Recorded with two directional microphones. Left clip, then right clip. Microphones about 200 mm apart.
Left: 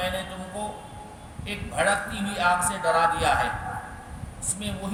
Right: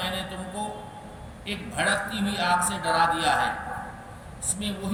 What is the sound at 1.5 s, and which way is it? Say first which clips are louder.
A man's voice: left 2 dB; 15° left (ahead or behind).